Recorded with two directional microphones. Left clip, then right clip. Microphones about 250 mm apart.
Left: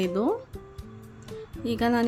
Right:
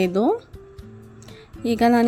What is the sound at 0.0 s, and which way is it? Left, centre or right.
Speech, right.